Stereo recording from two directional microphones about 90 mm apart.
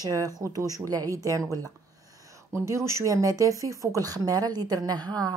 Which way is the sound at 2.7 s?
35° right (ahead or behind).